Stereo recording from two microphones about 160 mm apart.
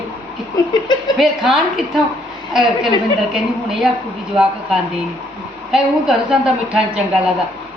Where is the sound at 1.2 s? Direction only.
Centre (ahead or behind).